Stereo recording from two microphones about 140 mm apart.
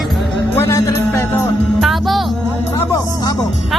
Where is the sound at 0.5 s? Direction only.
20° left (ahead or behind).